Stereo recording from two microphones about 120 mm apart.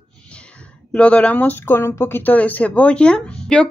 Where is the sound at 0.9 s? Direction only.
10° left (ahead or behind).